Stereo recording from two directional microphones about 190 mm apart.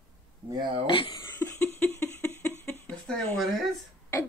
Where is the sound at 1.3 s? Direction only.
10° left (ahead or behind).